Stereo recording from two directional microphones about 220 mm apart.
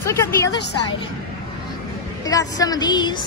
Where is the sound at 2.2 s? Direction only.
15° left (ahead or behind).